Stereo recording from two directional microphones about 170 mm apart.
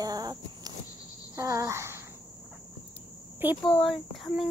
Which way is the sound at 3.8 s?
Centre (ahead or behind).